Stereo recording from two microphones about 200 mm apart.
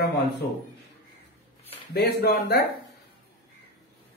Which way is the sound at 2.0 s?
50° left (ahead or behind).